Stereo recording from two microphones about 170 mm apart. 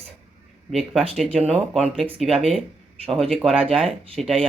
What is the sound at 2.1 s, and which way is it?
Speech, centre (ahead or behind).